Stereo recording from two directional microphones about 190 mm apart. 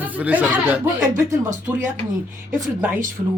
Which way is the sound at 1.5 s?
40° right (ahead or behind).